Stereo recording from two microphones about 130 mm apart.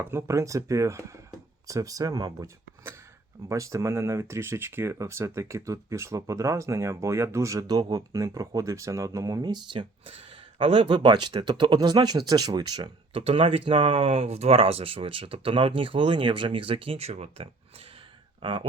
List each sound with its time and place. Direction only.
0.0 s speech: 20° right (ahead or behind); by 18.6 s 40° right (ahead or behind)